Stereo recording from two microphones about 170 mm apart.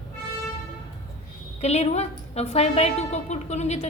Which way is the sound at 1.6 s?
40° left (ahead or behind).